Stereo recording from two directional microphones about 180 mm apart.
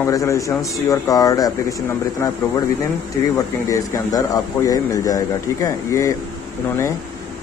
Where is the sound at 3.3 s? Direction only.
20° left (ahead or behind).